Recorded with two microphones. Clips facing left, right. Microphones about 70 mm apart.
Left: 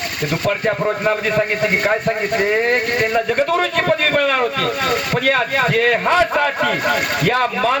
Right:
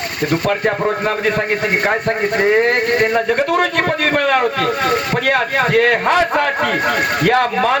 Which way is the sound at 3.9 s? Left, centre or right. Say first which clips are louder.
Right 1 dB; right.